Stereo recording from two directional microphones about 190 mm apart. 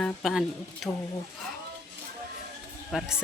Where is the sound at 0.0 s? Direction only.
Centre (ahead or behind).